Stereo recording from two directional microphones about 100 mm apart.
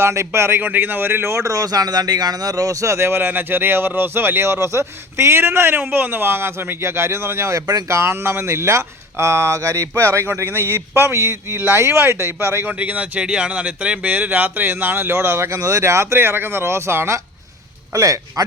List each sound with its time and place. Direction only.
0.0 s speech: 30° right (ahead or behind)
12.8 s speech: 15° right (ahead or behind); by 18.4 s 35° right (ahead or behind)